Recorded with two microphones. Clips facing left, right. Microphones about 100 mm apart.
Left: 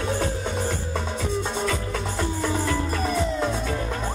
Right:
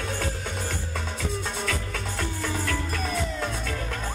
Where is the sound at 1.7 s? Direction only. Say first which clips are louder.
Left 4 dB; 20° left (ahead or behind).